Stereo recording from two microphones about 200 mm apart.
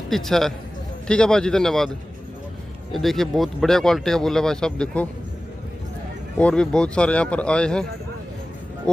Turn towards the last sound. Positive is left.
turn(degrees=5)  # may be behind; listen again after turning